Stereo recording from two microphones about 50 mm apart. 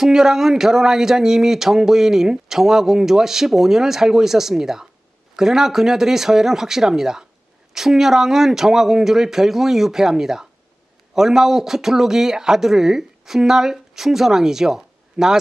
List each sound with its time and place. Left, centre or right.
0.0 s speech: centre